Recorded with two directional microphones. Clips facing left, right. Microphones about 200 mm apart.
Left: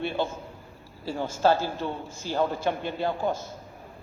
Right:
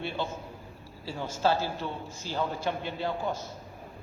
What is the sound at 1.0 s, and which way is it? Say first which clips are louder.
A man's voice: left 5 dB; 50° left (ahead or behind).